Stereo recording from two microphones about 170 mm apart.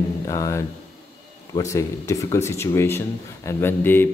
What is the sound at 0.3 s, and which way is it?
A man's voice, 20° left (ahead or behind).